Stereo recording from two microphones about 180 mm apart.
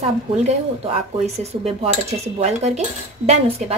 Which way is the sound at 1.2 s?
35° right (ahead or behind).